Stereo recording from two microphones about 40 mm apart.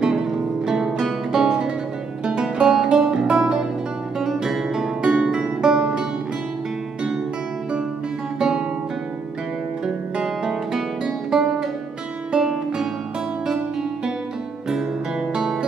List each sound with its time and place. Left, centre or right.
1.3 s music: centre
8.4 s music: centre
10.2 s music: centre